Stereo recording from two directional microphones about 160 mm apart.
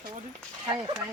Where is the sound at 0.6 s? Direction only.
25° right (ahead or behind).